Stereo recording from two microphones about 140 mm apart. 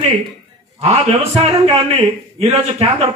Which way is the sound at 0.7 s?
50° right (ahead or behind).